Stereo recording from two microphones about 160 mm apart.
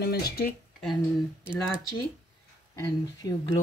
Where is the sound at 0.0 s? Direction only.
80° left.